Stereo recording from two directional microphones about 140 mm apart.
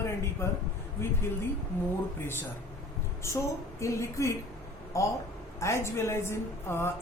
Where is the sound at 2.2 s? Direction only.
15° left (ahead or behind).